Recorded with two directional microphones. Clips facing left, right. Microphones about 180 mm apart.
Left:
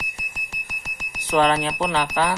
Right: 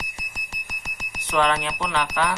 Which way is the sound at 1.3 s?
35° left (ahead or behind).